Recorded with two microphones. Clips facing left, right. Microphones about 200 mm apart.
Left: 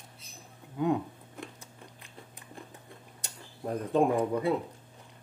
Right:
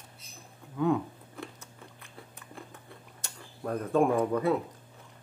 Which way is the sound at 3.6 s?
20° left (ahead or behind).